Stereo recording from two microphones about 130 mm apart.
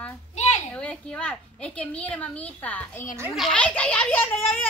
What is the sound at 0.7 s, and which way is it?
A child's voice, 10° left (ahead or behind).